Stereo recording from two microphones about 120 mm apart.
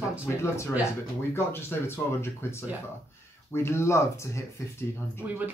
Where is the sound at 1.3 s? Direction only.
20° left (ahead or behind).